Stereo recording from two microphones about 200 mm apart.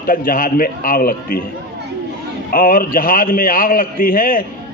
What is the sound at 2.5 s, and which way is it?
A man's voice, 45° left (ahead or behind).